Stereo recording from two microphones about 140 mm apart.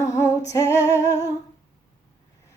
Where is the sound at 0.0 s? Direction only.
20° left (ahead or behind).